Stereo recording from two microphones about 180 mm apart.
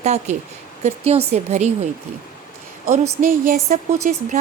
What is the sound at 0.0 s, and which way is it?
A woman's voice, 40° right (ahead or behind).